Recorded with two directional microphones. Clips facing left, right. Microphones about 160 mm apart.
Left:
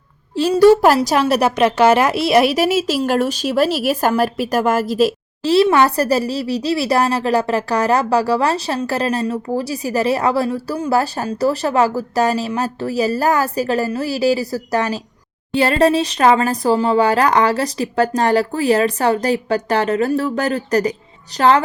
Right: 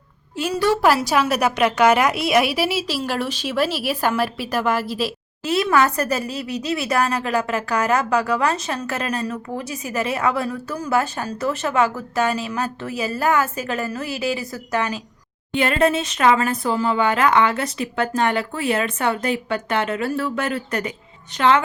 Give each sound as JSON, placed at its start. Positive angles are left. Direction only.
{"t": 0.3, "sound": "a woman's voice", "side_deg": 35}